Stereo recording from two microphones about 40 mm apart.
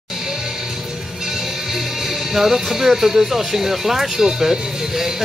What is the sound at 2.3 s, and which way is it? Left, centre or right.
Speech, centre.